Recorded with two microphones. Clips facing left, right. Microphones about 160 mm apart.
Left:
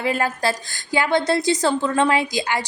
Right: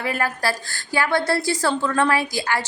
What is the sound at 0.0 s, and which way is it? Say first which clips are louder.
A woman's voice: left 2 dB; 25° left (ahead or behind).